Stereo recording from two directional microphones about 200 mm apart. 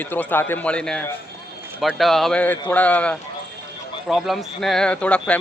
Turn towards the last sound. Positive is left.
turn(degrees=5)  # may be behind; listen again after turning